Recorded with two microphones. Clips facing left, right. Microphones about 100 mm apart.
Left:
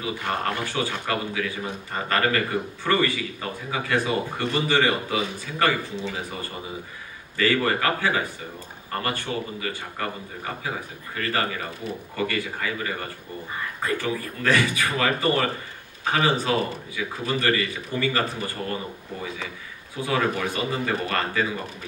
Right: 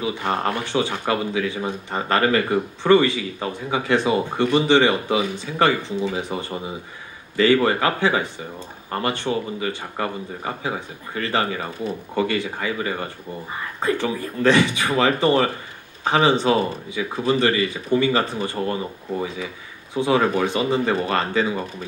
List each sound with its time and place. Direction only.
0.2 s speech: 25° right (ahead or behind)
7.3 s speech: 25° right (ahead or behind)
20.0 s speech: 25° right (ahead or behind)